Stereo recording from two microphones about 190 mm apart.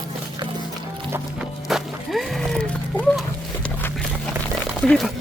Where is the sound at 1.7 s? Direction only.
Centre (ahead or behind).